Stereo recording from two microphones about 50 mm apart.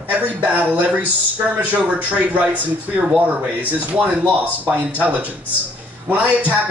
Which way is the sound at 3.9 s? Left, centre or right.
Right.